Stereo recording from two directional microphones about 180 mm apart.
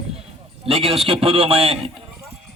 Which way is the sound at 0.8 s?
Centre (ahead or behind).